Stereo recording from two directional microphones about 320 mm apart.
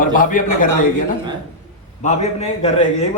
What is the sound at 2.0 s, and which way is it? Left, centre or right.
A man's voice, left.